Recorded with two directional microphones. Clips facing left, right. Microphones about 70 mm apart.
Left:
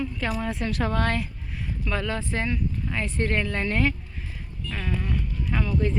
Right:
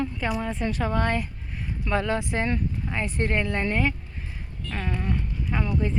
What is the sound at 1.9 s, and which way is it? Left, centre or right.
Speech, right.